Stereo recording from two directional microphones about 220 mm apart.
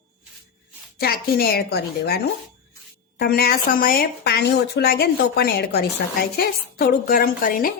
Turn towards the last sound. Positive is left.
turn(degrees=40)  # may be behind; listen again after turning